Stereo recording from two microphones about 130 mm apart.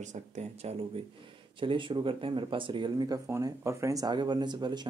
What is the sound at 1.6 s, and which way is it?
Speech, 40° right (ahead or behind).